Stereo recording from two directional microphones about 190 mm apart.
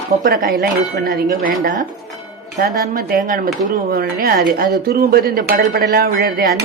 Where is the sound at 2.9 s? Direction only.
50° right (ahead or behind).